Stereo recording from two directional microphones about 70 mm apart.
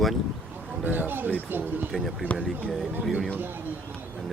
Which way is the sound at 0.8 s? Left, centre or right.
Right.